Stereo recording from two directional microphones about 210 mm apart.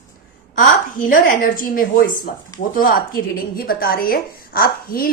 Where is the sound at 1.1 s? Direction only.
40° left (ahead or behind).